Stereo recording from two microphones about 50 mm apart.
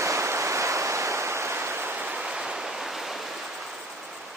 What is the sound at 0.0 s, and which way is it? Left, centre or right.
Waves, right.